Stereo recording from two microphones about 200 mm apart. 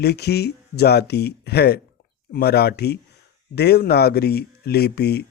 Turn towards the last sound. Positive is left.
turn(degrees=55)  # may be behind; listen again after turning